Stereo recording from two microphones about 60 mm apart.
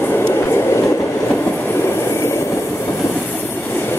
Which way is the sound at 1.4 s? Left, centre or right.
Left.